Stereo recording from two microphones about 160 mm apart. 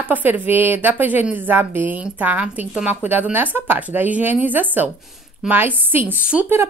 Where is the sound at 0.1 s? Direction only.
10° right (ahead or behind).